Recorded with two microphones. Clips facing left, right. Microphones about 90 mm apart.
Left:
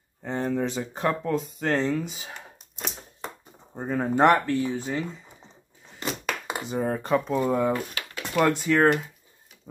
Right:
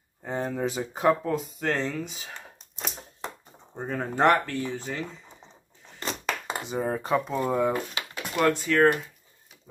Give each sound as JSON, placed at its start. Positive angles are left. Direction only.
{"t": 0.2, "sound": "speech", "side_deg": -5}
{"t": 3.7, "sound": "speech", "side_deg": 10}
{"t": 6.0, "sound": "a sound", "side_deg": 5}
{"t": 7.2, "sound": "speech", "side_deg": 0}
{"t": 7.7, "sound": "a sound", "side_deg": -15}
{"t": 8.5, "sound": "speech", "side_deg": 15}